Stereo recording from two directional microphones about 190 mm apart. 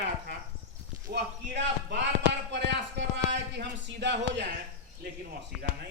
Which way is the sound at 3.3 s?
65° right (ahead or behind).